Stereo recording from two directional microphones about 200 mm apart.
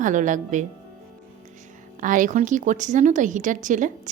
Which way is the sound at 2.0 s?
40° right (ahead or behind).